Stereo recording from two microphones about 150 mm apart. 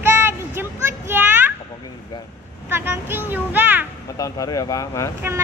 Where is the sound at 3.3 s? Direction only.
10° right (ahead or behind).